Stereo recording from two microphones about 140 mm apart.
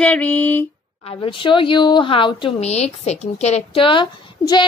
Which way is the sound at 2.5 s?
50° left (ahead or behind).